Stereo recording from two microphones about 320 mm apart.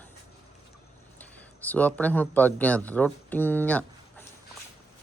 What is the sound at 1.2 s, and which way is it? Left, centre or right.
Speech, centre.